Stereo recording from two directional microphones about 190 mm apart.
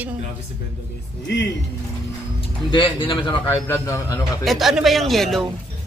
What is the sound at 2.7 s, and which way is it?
Speech, 25° left (ahead or behind).